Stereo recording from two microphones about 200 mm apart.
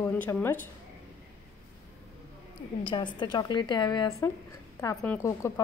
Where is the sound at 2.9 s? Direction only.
20° left (ahead or behind).